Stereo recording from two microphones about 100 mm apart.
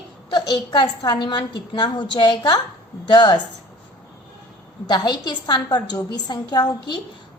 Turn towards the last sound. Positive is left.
turn(degrees=45)  # may be behind; listen again after turning